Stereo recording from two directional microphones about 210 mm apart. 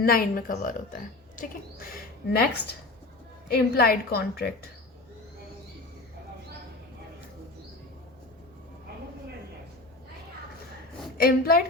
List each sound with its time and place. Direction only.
0.0 s speech: 45° left (ahead or behind)
3.5 s speech: 45° left (ahead or behind)
11.2 s speech: 45° left (ahead or behind)